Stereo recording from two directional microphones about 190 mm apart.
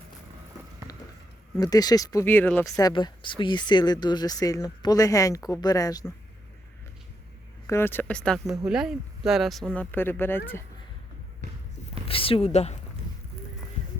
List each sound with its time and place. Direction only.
1.5 s speech: 20° left (ahead or behind)
7.7 s speech: 10° left (ahead or behind)
12.0 s speech: 30° left (ahead or behind)